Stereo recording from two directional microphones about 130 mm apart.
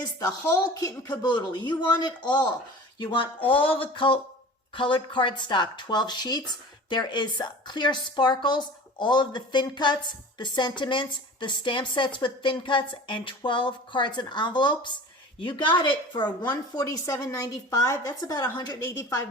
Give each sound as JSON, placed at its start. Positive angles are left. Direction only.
{"t": 0.0, "sound": "a woman's voice", "side_deg": 30}